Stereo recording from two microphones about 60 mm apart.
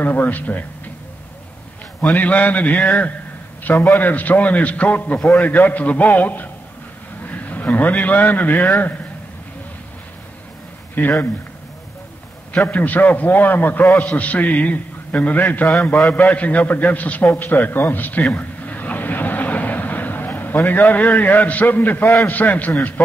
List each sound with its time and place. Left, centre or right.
0.0 s a man's voice: left
2.1 s a man's voice: left
11.0 s a man's voice: left
12.6 s a man's voice: left
18.2 s vehicle: left
22.3 s a man's voice: left